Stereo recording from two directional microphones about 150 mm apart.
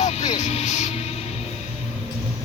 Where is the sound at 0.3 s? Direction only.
55° left (ahead or behind).